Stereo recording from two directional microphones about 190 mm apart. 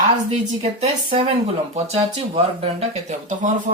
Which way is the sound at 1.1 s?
30° right (ahead or behind).